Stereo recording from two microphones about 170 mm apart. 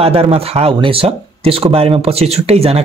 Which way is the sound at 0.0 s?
35° right (ahead or behind).